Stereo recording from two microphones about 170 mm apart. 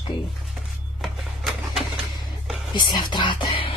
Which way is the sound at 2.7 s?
25° left (ahead or behind).